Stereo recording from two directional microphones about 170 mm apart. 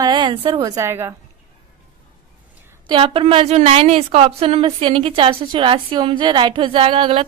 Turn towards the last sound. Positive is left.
turn(degrees=-30)  # may be behind; listen again after turning